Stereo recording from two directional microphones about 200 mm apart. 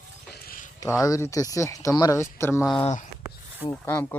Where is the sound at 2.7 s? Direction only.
25° left (ahead or behind).